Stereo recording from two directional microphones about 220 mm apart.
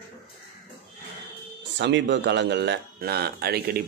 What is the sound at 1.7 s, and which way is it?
Speech, 55° right (ahead or behind).